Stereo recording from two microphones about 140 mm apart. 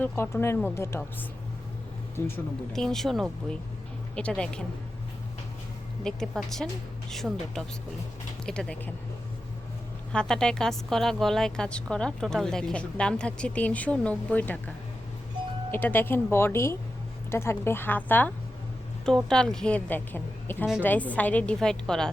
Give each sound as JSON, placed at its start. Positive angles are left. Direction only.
{"t": 0.0, "sound": "a woman's voice", "side_deg": 15}
{"t": 2.1, "sound": "speech", "side_deg": 15}
{"t": 2.7, "sound": "a woman's voice", "side_deg": 5}
{"t": 6.0, "sound": "a woman's voice", "side_deg": 5}
{"t": 10.1, "sound": "speech", "side_deg": 5}
{"t": 15.7, "sound": "a woman's voice", "side_deg": 15}